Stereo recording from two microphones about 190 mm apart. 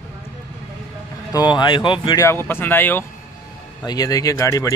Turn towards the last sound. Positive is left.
turn(degrees=15)  # may be behind; listen again after turning